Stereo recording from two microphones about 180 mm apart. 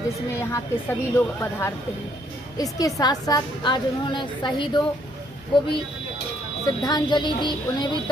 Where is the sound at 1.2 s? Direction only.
15° left (ahead or behind).